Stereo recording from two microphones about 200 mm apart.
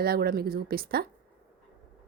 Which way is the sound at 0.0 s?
50° right (ahead or behind).